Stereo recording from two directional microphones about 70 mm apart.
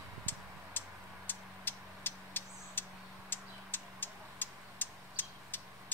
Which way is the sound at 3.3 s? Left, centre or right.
Left.